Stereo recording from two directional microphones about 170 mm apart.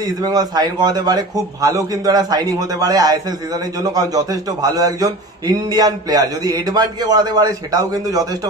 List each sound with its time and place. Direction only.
0.0 s a man's voice: 25° right (ahead or behind)